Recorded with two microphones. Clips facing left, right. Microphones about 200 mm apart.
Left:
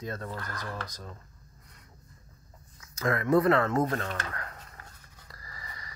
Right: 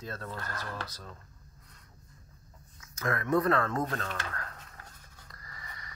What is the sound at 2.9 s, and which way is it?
Speech, 30° left (ahead or behind).